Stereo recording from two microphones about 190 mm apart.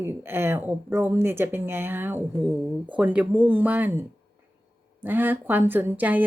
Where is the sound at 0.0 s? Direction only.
10° right (ahead or behind).